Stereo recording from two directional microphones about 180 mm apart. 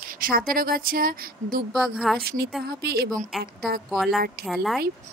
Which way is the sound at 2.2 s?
60° right (ahead or behind).